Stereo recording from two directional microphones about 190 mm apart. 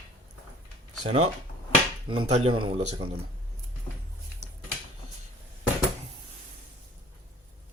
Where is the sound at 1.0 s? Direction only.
30° right (ahead or behind).